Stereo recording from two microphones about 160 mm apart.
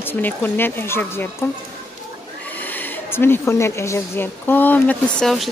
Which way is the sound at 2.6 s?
10° left (ahead or behind).